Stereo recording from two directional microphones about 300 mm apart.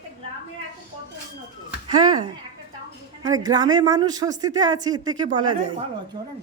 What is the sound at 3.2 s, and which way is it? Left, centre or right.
Speech, centre.